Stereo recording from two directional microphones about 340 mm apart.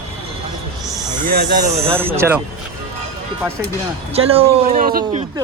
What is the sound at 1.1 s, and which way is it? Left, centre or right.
Speech, right.